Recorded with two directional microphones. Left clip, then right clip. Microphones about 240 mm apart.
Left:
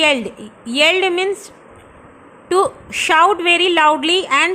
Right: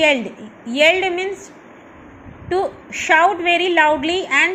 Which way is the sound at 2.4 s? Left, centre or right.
Left.